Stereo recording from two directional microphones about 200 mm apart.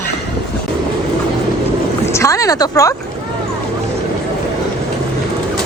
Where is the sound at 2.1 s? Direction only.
15° left (ahead or behind).